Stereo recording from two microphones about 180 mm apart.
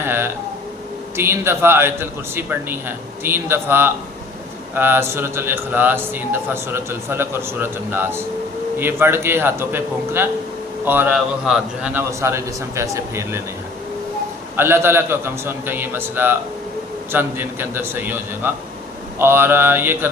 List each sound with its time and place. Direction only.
0.0 s a sound: 10° right (ahead or behind)
1.1 s a man's voice: 15° right (ahead or behind)
14.5 s a man's voice: 10° right (ahead or behind)